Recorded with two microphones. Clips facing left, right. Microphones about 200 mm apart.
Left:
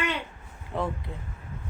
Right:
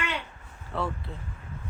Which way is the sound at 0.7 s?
15° left (ahead or behind).